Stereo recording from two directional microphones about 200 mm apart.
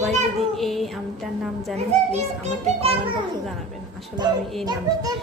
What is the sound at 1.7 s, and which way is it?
A child's voice, 30° right (ahead or behind).